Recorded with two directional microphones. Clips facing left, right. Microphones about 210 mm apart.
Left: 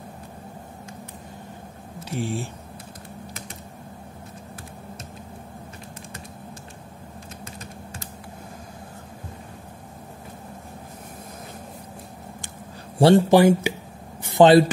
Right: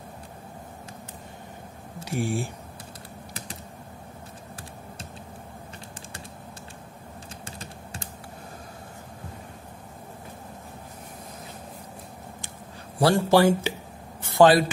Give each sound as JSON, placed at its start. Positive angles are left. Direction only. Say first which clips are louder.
{"t": 2.0, "sound": "speech", "louder": "right 1 dB", "side_deg": -10}
{"t": 7.4, "sound": "typing", "louder": "left 2 dB", "side_deg": -30}
{"t": 13.0, "sound": "speech", "louder": "left 4 dB", "side_deg": 20}
{"t": 14.2, "sound": "a sound", "louder": "left 3 dB", "side_deg": 20}